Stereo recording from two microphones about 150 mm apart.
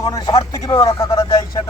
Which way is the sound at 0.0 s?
25° left (ahead or behind).